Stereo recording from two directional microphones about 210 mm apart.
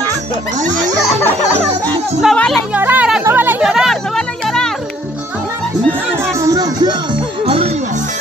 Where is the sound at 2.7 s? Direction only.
10° right (ahead or behind).